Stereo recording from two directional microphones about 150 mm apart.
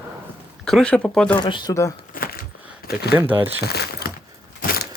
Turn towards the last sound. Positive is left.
turn(degrees=65)  # may be behind; listen again after turning